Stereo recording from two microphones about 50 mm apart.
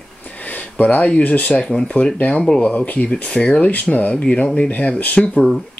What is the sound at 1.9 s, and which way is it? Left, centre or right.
Speech, centre.